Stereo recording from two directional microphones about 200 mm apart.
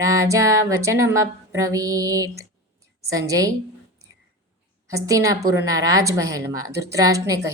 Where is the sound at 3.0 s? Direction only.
15° right (ahead or behind).